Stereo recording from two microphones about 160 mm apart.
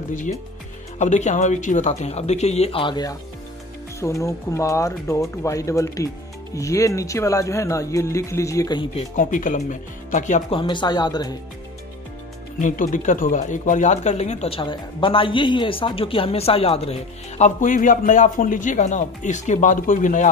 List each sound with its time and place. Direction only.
0.1 s speech: 50° left (ahead or behind); by 8.8 s 25° left (ahead or behind)
8.9 s speech: 55° left (ahead or behind)
10.5 s speech: 30° left (ahead or behind)
12.5 s speech: 55° left (ahead or behind)
17.6 s speech: 55° left (ahead or behind)